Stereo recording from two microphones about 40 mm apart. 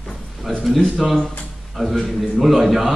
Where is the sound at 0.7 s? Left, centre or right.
Centre.